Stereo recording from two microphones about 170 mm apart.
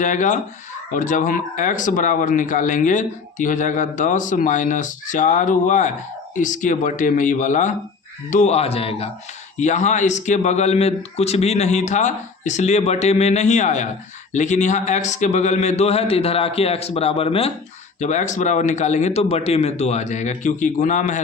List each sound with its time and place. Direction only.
0.0 s a man's voice: 50° left (ahead or behind)
18.0 s speech: 45° left (ahead or behind)